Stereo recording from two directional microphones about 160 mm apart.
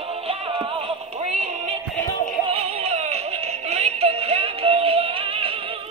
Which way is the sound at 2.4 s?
40° right (ahead or behind).